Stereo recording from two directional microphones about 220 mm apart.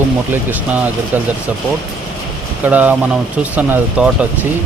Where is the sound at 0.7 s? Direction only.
5° right (ahead or behind).